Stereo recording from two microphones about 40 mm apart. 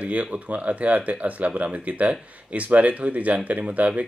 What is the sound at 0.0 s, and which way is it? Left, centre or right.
Speech, right.